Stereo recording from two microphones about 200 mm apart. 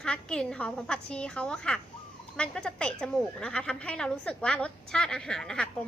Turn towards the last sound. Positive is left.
turn(degrees=5)  # may be behind; listen again after turning